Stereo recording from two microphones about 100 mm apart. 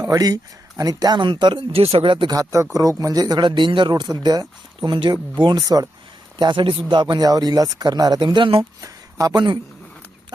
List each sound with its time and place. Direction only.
0.0 s speech: 40° right (ahead or behind)
1.7 s speech: 80° right; by 2.3 s 60° right (ahead or behind)
2.3 s speech: 35° right (ahead or behind)
6.4 s speech: 55° right (ahead or behind)
8.8 s a sound: 35° right (ahead or behind)
9.3 s speech: 50° right (ahead or behind)